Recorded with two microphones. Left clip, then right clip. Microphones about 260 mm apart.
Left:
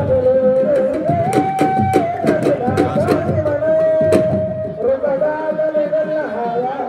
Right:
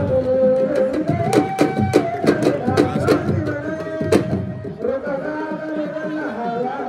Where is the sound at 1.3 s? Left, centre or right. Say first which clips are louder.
Left 3 dB; centre.